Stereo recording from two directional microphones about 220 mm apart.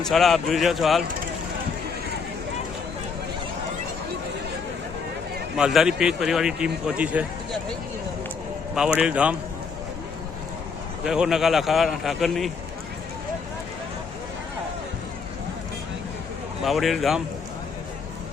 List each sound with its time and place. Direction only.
0.0 s a man's voice: centre (ahead or behind)
5.5 s a man's voice: 5° right (ahead or behind)
8.7 s a man's voice: 5° right (ahead or behind)
11.0 s a man's voice: 5° right (ahead or behind)
16.6 s a man's voice: centre (ahead or behind)